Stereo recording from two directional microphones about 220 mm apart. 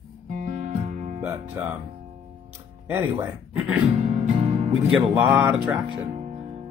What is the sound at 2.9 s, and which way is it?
Speech, 5° right (ahead or behind).